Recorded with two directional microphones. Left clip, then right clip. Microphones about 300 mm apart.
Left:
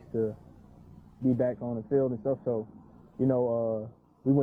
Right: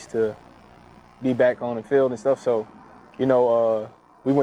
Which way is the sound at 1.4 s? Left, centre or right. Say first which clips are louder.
Right 10 dB; centre.